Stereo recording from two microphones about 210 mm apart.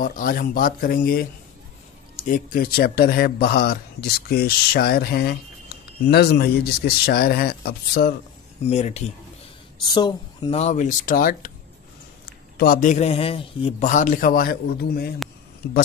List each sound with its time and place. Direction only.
0.0 s speech: 40° left (ahead or behind)
8.6 s a man's voice: 30° left (ahead or behind)
9.8 s a man's voice: 20° left (ahead or behind); by 15.1 s 50° left (ahead or behind)